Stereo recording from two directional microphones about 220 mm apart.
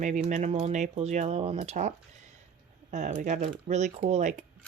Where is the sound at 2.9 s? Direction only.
35° right (ahead or behind).